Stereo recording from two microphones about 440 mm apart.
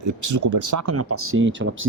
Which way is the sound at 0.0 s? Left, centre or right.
Right.